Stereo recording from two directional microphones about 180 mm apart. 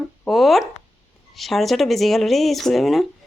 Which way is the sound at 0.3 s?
Centre (ahead or behind).